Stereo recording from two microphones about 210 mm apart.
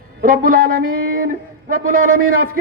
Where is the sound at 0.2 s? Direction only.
40° right (ahead or behind).